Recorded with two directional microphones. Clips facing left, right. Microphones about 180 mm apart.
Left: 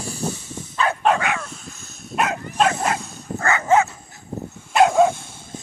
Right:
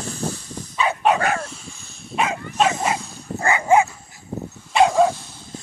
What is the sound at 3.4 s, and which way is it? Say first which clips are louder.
Dog: right 1 dB; 15° right (ahead or behind).